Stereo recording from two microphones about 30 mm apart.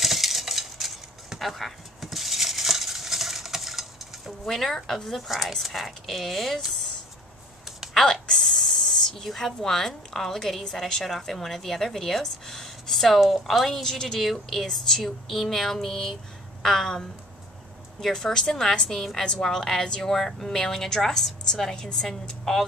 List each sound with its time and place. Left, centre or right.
0.0 s a sound: centre
4.5 s a woman's voice: centre
7.9 s a sound: centre
9.2 s a woman's voice: centre
13.8 s a woman's voice: centre
18.0 s a woman's voice: centre
21.7 s a woman's voice: left